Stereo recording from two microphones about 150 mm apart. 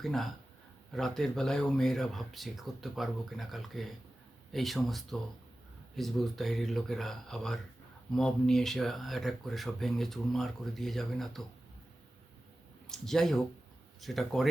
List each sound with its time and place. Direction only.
0.0 s speech: centre (ahead or behind)
12.9 s speech: 5° left (ahead or behind)